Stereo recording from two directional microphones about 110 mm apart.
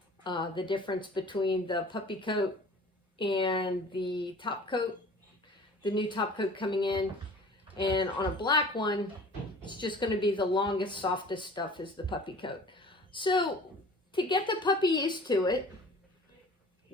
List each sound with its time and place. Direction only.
0.3 s speech: 45° left (ahead or behind)
5.8 s speech: 45° left (ahead or behind)